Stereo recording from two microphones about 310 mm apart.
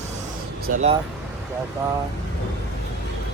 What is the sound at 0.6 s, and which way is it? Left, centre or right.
Speech, right.